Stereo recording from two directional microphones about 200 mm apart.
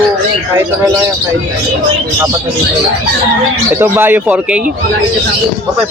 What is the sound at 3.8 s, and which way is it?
Speech, 10° right (ahead or behind).